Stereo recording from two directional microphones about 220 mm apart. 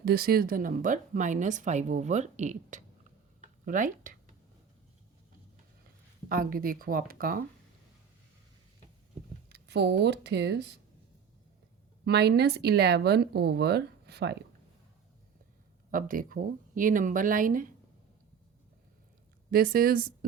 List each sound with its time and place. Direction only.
0.0 s a woman's voice: 45° right (ahead or behind)
6.2 s a woman's voice: 40° right (ahead or behind)
9.5 s speech: 50° right (ahead or behind)
12.0 s speech: 50° right (ahead or behind)
15.9 s a woman's voice: 40° right (ahead or behind)
19.5 s a woman's voice: 40° right (ahead or behind)